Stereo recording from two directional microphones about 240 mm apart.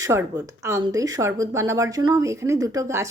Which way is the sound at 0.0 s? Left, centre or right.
Centre.